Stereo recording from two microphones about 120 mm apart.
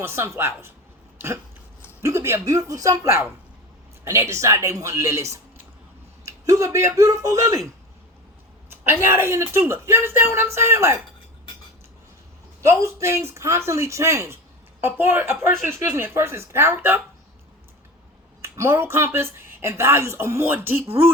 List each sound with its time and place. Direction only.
0.0 s speech: 25° right (ahead or behind)
2.0 s speech: 20° right (ahead or behind)
8.7 s speech: 20° right (ahead or behind)
12.6 s speech: 25° right (ahead or behind)
18.4 s speech: 20° right (ahead or behind)